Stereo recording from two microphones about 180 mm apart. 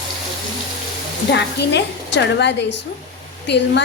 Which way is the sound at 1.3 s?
70° left (ahead or behind).